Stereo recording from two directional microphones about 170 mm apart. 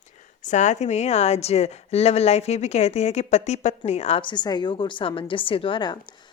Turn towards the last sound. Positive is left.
turn(degrees=30)  # may be behind; listen again after turning